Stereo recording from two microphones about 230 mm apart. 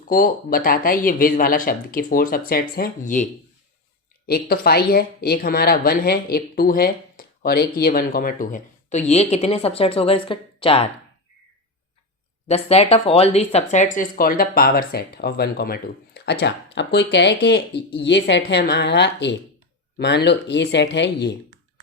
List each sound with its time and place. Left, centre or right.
0.1 s speech: left
4.3 s a woman's voice: left
12.5 s a woman's voice: left